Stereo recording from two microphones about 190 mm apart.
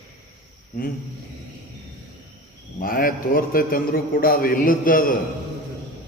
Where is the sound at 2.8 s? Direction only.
50° left (ahead or behind).